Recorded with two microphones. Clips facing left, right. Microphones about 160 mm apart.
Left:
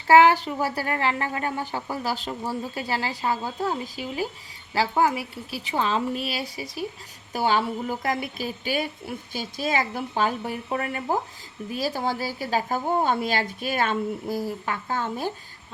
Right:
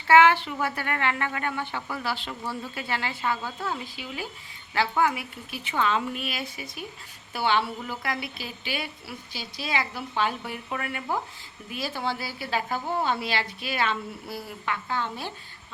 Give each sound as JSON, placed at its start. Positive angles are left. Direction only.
{"t": 0.1, "sound": "a woman's voice", "side_deg": 40}